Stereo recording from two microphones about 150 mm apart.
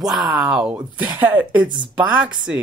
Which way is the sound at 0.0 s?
Centre (ahead or behind).